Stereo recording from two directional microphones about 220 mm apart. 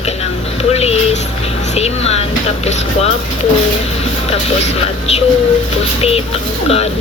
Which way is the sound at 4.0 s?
30° left (ahead or behind).